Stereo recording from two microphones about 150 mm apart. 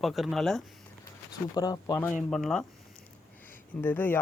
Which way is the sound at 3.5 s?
10° left (ahead or behind).